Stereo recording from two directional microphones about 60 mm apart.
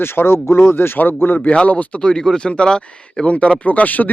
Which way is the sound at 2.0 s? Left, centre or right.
Centre.